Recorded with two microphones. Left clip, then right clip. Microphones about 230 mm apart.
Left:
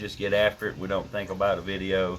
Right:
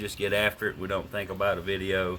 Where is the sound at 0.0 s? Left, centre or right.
Right.